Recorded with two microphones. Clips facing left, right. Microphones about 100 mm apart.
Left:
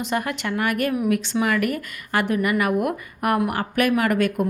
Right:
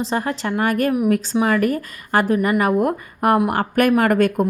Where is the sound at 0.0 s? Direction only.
30° right (ahead or behind).